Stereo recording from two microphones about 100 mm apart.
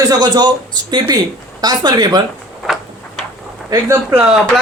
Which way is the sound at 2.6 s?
Centre (ahead or behind).